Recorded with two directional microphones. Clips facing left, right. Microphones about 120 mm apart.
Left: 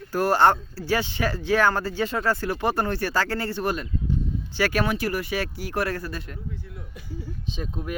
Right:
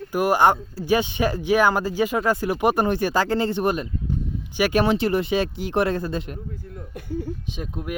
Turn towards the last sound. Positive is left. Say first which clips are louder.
# right 1 dB
turn(degrees=-10)  # may be behind; listen again after turning